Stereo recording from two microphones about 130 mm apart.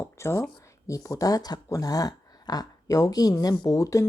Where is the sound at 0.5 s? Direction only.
25° left (ahead or behind).